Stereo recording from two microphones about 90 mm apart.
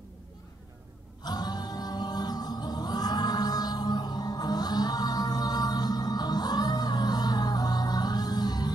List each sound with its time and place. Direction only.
1.2 s music: 50° left (ahead or behind)